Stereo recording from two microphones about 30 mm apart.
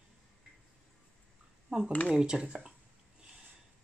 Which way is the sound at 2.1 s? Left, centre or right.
Right.